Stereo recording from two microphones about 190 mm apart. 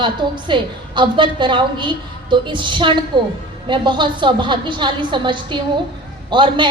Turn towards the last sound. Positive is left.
turn(degrees=-25)  # may be behind; listen again after turning